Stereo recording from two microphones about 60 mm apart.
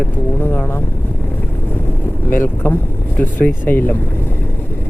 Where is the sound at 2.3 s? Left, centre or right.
Left.